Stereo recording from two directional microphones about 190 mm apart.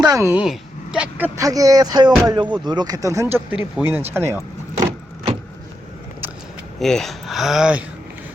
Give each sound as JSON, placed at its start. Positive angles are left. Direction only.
{"t": 0.0, "sound": "speech", "side_deg": -15}
{"t": 0.4, "sound": "speech", "side_deg": 0}
{"t": 1.4, "sound": "speech", "side_deg": -20}
{"t": 4.8, "sound": "vehicle", "side_deg": -25}
{"t": 6.7, "sound": "speech", "side_deg": 0}